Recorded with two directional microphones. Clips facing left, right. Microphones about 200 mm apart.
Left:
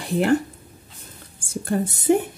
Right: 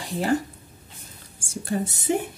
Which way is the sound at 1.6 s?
55° left (ahead or behind).